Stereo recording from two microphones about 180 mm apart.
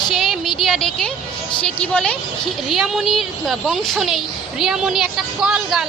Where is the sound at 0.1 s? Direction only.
Centre (ahead or behind).